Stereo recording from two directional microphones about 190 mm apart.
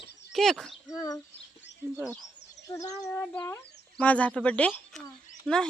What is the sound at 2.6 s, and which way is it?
Speech, 20° left (ahead or behind).